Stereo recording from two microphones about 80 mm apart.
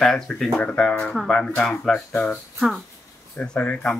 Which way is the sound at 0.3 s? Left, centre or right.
Centre.